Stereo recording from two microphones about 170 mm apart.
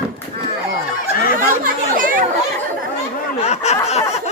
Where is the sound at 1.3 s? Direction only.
50° right (ahead or behind).